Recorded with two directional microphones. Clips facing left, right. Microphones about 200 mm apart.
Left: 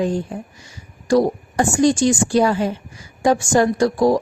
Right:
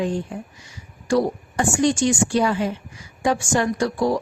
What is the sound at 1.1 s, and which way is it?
Speech, 40° left (ahead or behind).